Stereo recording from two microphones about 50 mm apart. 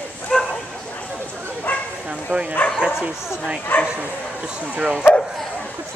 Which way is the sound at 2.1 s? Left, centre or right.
Right.